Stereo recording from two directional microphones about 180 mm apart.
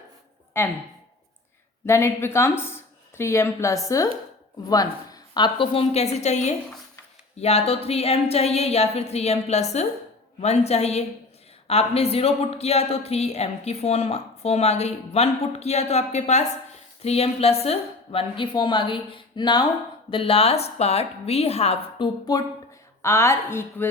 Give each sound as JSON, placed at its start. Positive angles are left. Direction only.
{"t": 1.9, "sound": "a woman's voice", "side_deg": 15}